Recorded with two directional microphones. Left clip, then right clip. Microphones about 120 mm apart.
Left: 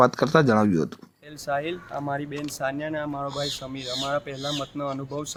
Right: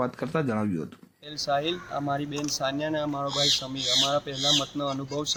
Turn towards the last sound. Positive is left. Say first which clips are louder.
# even
turn(degrees=0)  # may be behind; listen again after turning